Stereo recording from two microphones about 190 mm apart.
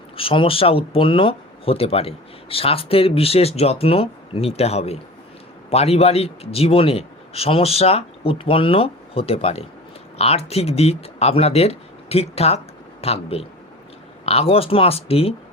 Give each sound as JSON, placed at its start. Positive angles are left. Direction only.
{"t": 0.2, "sound": "speech", "side_deg": 30}